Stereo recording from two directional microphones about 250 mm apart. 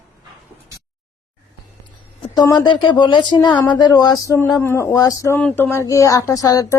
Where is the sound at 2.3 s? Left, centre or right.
Centre.